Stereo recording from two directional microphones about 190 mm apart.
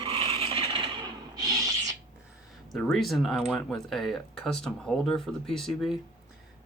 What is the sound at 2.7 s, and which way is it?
Speech, centre (ahead or behind).